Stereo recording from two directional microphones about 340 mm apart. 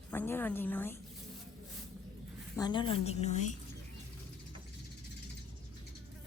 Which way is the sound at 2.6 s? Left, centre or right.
Centre.